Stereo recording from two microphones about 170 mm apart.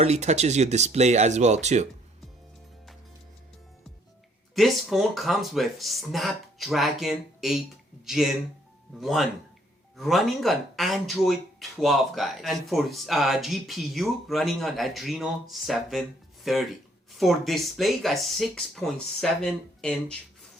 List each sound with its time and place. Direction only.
0.0 s speech: 40° right (ahead or behind)
4.5 s speech: centre (ahead or behind)